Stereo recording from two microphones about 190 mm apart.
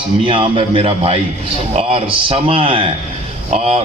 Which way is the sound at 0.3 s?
30° right (ahead or behind).